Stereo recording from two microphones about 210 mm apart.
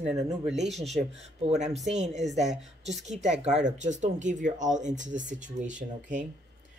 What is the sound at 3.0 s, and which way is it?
Speech, 35° right (ahead or behind).